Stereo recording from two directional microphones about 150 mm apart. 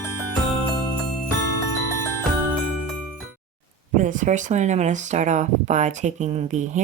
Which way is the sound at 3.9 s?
60° right (ahead or behind).